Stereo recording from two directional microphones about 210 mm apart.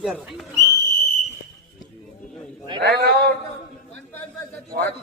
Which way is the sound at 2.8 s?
50° right (ahead or behind).